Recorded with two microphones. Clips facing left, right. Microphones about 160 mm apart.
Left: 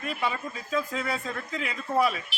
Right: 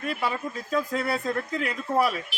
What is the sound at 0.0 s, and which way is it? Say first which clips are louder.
Speech: right 2 dB; 5° right (ahead or behind).